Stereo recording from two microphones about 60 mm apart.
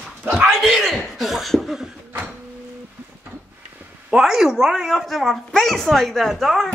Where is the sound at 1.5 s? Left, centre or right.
Centre.